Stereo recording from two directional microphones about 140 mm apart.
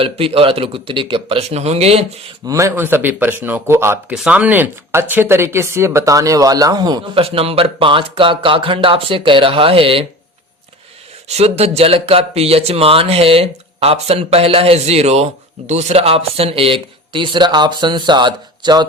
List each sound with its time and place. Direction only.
0.0 s speech: 40° right (ahead or behind)
2.5 s speech: 20° right (ahead or behind)
4.1 s speech: 5° right (ahead or behind); by 7.2 s 30° right (ahead or behind)
7.2 s speech: 45° right (ahead or behind)
11.3 s speech: 50° right (ahead or behind); by 18.9 s 30° right (ahead or behind)